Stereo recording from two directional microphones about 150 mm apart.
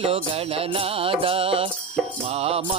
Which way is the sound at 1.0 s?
35° right (ahead or behind).